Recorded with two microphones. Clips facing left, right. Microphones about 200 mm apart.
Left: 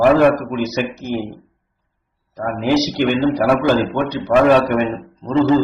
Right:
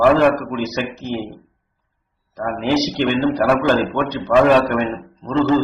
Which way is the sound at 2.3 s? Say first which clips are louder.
Left 2 dB; 5° left (ahead or behind).